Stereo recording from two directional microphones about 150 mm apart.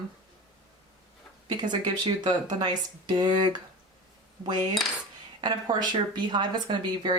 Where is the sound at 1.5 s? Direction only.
30° right (ahead or behind).